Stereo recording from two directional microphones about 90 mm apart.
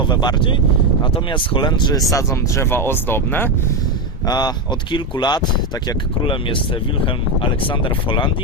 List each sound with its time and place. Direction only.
0.0 s speech: 55° left (ahead or behind); by 3.5 s 25° left (ahead or behind)
4.3 s speech: 50° left (ahead or behind)
6.2 s speech: 70° left (ahead or behind)